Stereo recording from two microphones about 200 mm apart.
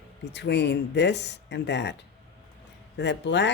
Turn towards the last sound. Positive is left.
turn(degrees=60)  # may be behind; listen again after turning